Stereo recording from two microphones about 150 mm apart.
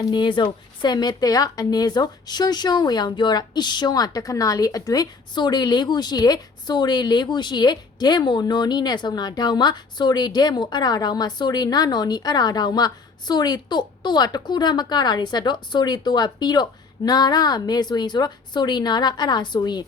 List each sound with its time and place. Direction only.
0.1 s a woman's voice: 35° left (ahead or behind)